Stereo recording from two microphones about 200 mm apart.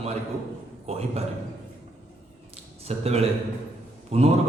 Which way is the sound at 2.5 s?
30° right (ahead or behind).